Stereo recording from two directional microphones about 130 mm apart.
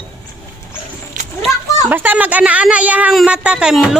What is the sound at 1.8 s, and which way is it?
Speech, 15° right (ahead or behind).